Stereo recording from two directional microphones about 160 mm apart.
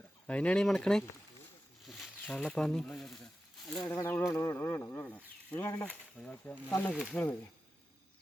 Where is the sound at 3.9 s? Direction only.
15° left (ahead or behind).